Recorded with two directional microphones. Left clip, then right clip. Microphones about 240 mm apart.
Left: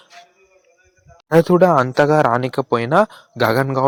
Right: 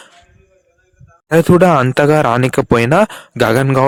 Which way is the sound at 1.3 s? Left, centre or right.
Right.